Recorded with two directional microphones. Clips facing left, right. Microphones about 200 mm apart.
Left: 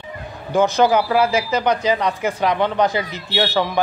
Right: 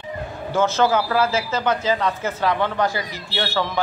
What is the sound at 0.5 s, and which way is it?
A man's voice, 15° left (ahead or behind).